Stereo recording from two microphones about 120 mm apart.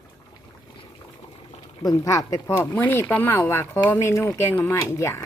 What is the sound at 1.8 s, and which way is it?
Speech, 30° left (ahead or behind).